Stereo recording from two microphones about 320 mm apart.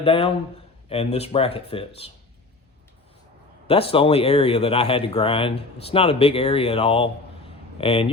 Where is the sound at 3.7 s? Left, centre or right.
Centre.